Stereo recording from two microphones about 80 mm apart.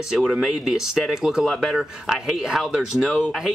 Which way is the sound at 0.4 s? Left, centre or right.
Centre.